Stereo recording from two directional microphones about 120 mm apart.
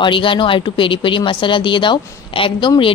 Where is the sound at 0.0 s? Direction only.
45° left (ahead or behind).